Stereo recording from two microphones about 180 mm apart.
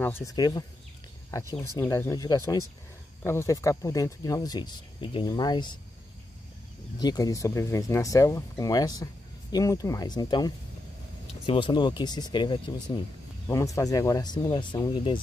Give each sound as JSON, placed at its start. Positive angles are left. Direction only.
{"t": 0.0, "sound": "speech", "side_deg": 15}
{"t": 7.0, "sound": "speech", "side_deg": 20}